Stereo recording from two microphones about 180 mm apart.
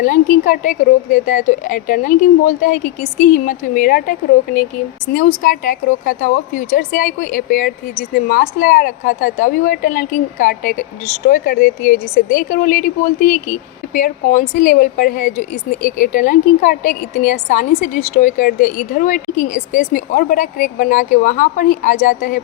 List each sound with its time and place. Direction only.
0.0 s a woman's voice: 45° left (ahead or behind)